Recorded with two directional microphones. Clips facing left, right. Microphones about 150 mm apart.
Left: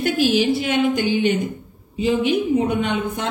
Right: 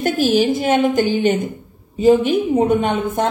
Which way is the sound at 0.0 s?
45° right (ahead or behind).